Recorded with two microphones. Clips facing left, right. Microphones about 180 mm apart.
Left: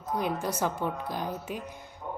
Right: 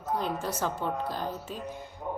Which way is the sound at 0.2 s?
15° left (ahead or behind).